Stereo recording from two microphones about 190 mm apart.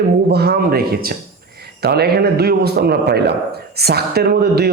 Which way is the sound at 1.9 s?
55° right (ahead or behind).